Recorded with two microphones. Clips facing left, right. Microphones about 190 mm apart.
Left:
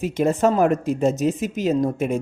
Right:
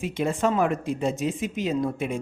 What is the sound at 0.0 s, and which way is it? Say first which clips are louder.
Speech: left 6 dB; 40° left (ahead or behind).